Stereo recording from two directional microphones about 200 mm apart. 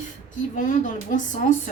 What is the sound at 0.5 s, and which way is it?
A woman's voice, 40° left (ahead or behind).